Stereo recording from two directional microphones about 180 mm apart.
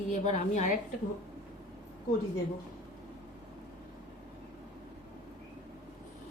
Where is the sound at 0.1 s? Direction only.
45° left (ahead or behind).